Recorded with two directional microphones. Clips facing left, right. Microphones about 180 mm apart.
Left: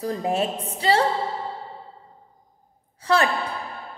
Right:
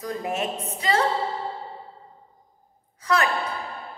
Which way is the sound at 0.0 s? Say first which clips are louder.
Left 4 dB; 30° left (ahead or behind).